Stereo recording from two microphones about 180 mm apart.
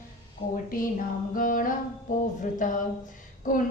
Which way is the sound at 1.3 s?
50° left (ahead or behind).